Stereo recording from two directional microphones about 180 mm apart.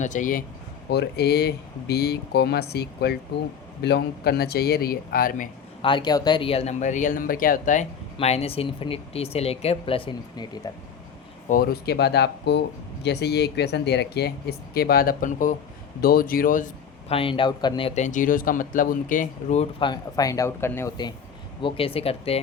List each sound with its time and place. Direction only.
0.0 s speech: 45° left (ahead or behind)
0.9 s speech: 65° left (ahead or behind)
5.8 s speech: 25° left (ahead or behind)
11.4 s speech: 50° left (ahead or behind)
17.1 s speech: 30° left (ahead or behind)
19.8 s speech: 20° left (ahead or behind)
21.6 s speech: 30° left (ahead or behind)